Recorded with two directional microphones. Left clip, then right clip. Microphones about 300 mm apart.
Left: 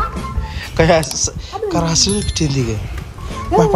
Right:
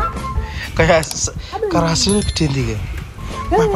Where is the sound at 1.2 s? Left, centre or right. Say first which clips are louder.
Even; centre.